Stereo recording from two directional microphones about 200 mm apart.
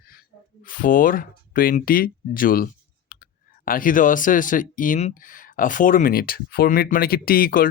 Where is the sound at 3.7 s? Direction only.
45° left (ahead or behind).